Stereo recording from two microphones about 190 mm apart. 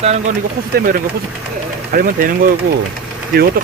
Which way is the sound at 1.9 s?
50° right (ahead or behind).